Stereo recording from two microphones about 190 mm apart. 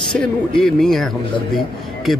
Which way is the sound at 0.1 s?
5° left (ahead or behind).